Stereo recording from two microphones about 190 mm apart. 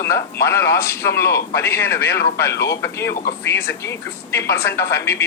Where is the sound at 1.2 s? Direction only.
15° left (ahead or behind).